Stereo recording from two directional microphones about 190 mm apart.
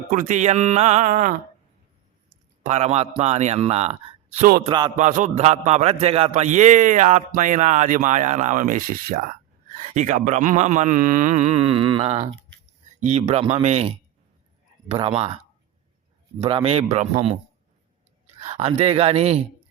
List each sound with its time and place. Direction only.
0.1 s a man's voice: 45° right (ahead or behind)
2.6 s a man's voice: 35° right (ahead or behind)
4.6 s music: 25° right (ahead or behind)
4.9 s a man's voice: 40° right (ahead or behind)
16.4 s a man's voice: 30° right (ahead or behind)
18.3 s a man's voice: 35° right (ahead or behind)